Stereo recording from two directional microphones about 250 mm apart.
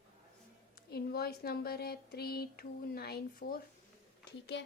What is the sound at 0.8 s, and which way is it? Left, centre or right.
Speech, left.